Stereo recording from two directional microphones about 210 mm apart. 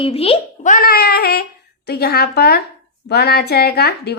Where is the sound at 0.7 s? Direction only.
45° left (ahead or behind).